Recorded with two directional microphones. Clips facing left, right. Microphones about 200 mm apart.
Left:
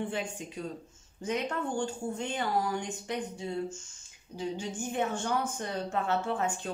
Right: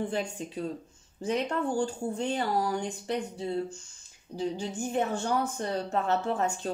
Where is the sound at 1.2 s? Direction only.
35° right (ahead or behind).